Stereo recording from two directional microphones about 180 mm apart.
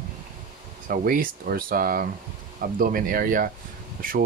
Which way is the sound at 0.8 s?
50° right (ahead or behind).